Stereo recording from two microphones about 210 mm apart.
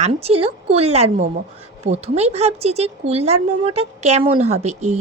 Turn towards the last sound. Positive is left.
turn(degrees=-35)  # may be behind; listen again after turning